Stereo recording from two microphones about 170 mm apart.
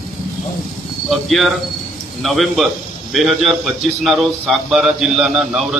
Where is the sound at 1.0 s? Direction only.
Centre (ahead or behind).